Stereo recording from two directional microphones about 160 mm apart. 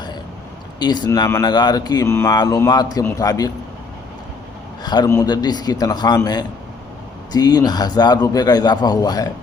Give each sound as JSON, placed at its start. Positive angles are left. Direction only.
{"t": 0.8, "sound": "speech", "side_deg": 25}
{"t": 4.8, "sound": "speech", "side_deg": 25}